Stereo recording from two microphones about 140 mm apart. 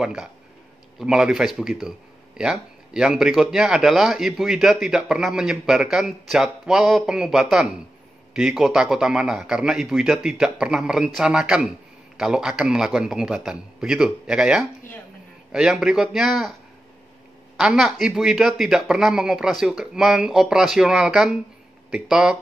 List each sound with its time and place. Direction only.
0.0 s a man's voice: 5° right (ahead or behind)
17.6 s a man's voice: centre (ahead or behind)